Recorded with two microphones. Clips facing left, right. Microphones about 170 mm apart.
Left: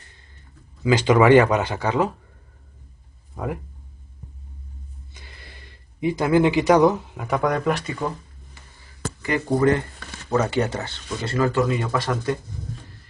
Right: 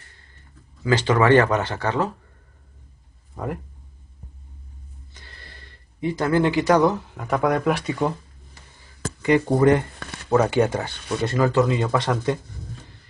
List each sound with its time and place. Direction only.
0.8 s speech: 15° left (ahead or behind)
3.4 s speech: 10° left (ahead or behind)
5.1 s a sound: 15° left (ahead or behind)
7.3 s speech: 5° right (ahead or behind)
9.2 s speech: 20° right (ahead or behind)